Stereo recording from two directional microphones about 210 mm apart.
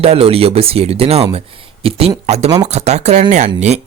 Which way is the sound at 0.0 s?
30° right (ahead or behind).